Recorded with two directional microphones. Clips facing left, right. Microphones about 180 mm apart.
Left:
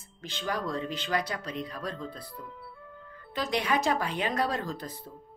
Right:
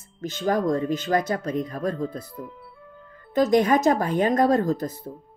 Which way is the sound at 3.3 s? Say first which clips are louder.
Right 11 dB; 45° right (ahead or behind).